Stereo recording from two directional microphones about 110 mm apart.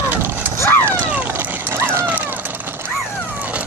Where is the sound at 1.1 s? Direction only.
15° right (ahead or behind).